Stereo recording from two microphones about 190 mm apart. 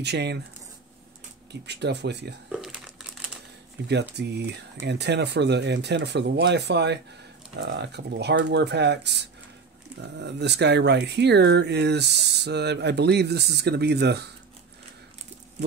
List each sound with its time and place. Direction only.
0.0 s speech: 60° right (ahead or behind)
1.5 s speech: 65° right (ahead or behind)
2.5 s crumpling: 5° right (ahead or behind)
4.1 s speech: 65° right (ahead or behind)